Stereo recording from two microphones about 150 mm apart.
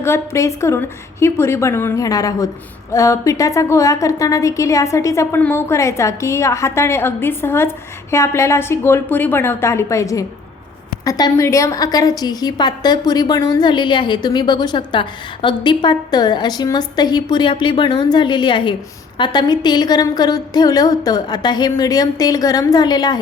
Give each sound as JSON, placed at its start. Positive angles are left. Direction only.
{"t": 0.0, "sound": "a woman's voice", "side_deg": 20}